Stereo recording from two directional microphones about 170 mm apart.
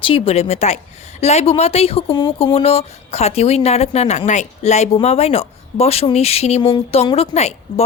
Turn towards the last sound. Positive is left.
turn(degrees=40)  # may be behind; listen again after turning